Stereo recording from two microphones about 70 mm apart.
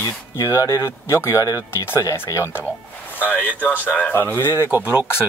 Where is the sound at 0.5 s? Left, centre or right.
Left.